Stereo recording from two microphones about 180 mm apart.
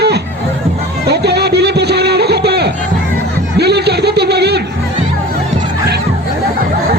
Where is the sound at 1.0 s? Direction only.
65° right (ahead or behind).